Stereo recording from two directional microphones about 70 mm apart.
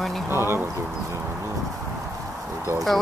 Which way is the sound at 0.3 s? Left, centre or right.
Right.